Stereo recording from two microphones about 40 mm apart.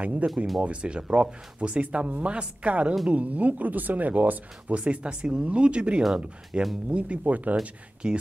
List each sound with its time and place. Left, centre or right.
0.0 s speech: right
8.0 s speech: right